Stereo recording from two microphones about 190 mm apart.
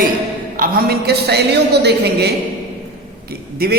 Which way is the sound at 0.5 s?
50° right (ahead or behind).